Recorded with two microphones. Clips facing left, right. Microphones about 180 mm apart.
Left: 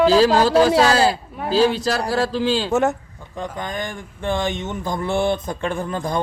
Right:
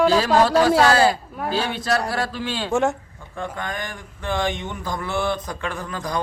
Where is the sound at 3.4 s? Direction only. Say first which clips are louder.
Left 2 dB; 20° left (ahead or behind).